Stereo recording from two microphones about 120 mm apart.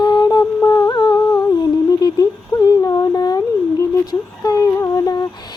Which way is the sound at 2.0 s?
30° left (ahead or behind).